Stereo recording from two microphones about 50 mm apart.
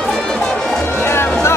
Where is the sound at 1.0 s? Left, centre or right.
Left.